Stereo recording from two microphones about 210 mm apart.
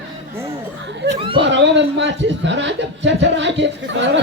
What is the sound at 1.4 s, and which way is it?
A man's voice, 60° right (ahead or behind).